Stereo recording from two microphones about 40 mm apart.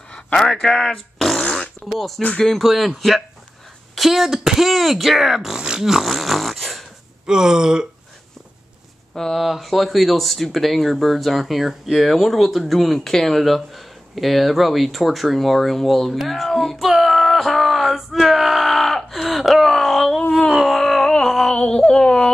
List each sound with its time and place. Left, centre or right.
0.4 s speech: centre
3.9 s speech: centre
5.6 s a sound: centre
5.9 s snoring: centre
7.2 s speech: centre
9.3 s speech: centre
16.8 s male singing: centre
18.2 s a sound: centre
19.1 s wail: centre
20.2 s wail: left
20.6 s a sound: centre
21.5 s speech: centre